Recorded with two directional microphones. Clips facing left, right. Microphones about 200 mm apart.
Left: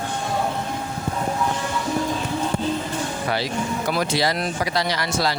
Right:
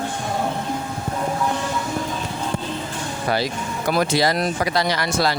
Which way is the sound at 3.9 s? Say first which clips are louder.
Right 5 dB; 50° right (ahead or behind).